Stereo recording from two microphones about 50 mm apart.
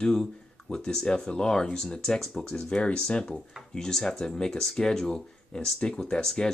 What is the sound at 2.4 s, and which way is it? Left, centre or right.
Speech, left.